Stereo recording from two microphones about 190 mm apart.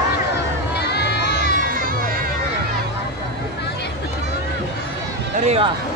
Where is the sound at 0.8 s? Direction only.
60° left (ahead or behind).